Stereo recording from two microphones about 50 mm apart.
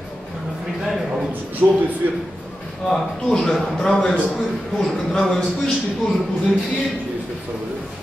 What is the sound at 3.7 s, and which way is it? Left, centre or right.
A man's voice, centre.